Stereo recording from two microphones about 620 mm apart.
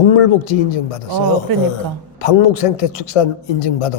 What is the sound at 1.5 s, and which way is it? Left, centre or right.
Speech, right.